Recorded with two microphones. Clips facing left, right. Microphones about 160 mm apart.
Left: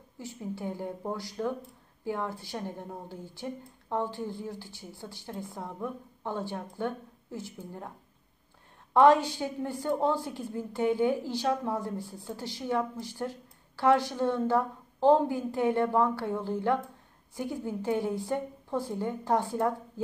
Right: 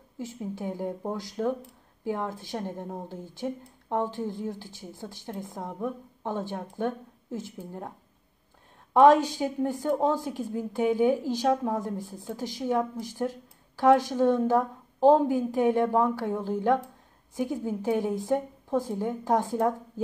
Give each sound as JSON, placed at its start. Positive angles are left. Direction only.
{"t": 0.2, "sound": "a woman's voice", "side_deg": -15}
{"t": 8.9, "sound": "a woman's voice", "side_deg": -15}